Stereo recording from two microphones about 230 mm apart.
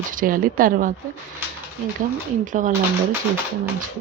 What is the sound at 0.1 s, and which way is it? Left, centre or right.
Speech, right.